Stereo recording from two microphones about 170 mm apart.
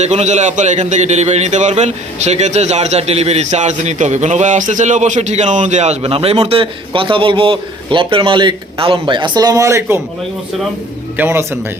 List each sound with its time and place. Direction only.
0.0 s a man's voice: 40° right (ahead or behind); by 10.0 s 15° right (ahead or behind)
11.2 s speech: 15° right (ahead or behind)